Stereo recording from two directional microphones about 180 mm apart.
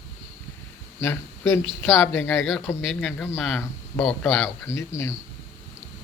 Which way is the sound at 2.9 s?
5° left (ahead or behind).